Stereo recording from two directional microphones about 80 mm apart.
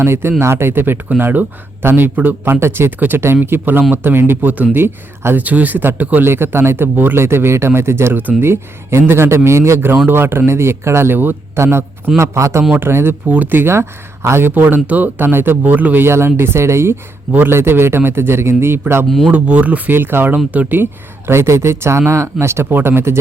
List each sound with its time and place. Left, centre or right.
0.0 s speech: right
19.0 s speech: centre
19.3 s speech: centre
21.2 s speech: right